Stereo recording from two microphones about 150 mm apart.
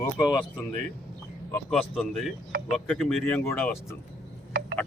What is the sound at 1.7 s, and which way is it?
Speech, centre (ahead or behind).